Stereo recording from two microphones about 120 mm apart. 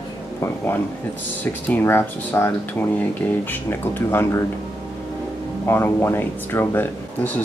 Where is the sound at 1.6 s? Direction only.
20° left (ahead or behind).